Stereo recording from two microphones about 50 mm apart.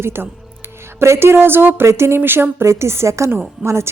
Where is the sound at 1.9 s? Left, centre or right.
Right.